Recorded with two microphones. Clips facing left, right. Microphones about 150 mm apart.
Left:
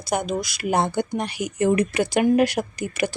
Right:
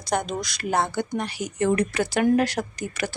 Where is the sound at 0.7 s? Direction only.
15° left (ahead or behind).